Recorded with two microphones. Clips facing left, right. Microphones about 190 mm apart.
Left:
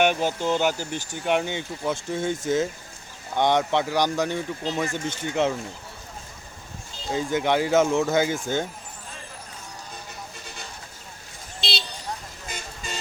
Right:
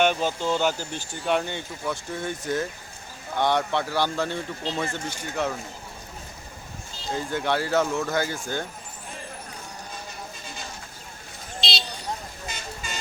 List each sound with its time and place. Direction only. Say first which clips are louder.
0.0 s speech: left 1 dB; 15° left (ahead or behind)
7.1 s speech: left 3 dB; 15° left (ahead or behind)